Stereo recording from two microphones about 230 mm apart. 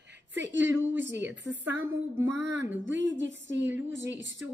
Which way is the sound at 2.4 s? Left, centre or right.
Right.